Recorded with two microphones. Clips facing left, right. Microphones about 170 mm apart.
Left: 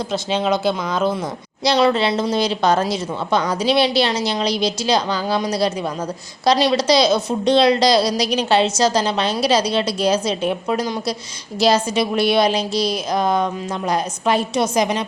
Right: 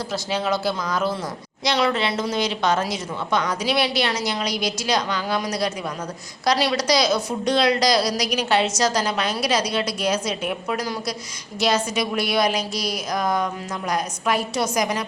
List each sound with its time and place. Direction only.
0.1 s a woman's voice: 20° left (ahead or behind)